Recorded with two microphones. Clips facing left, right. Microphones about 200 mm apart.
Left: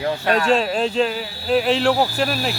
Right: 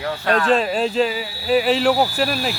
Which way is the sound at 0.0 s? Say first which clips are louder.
Left 1 dB; 20° left (ahead or behind).